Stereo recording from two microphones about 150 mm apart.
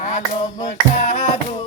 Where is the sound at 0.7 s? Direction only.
60° left (ahead or behind).